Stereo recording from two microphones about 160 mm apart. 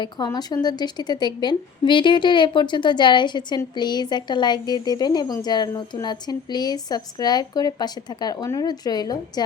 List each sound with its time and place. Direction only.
0.3 s a woman's voice: 25° left (ahead or behind)